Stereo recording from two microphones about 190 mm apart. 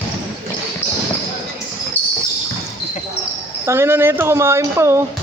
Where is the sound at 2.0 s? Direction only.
10° left (ahead or behind).